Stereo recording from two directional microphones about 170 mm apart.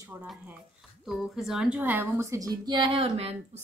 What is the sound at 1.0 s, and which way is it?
A woman's voice, centre (ahead or behind).